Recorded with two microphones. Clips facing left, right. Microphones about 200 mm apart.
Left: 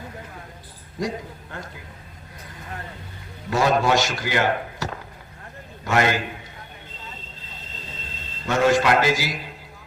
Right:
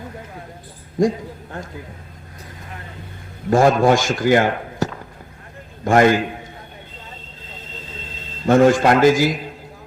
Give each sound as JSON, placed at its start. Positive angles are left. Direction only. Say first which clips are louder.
{"t": 3.5, "sound": "speech", "louder": "right 6 dB", "side_deg": -50}
{"t": 8.4, "sound": "speech", "louder": "right 6 dB", "side_deg": -50}